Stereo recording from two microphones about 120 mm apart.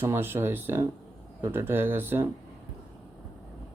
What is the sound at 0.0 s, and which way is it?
Speech, 20° right (ahead or behind).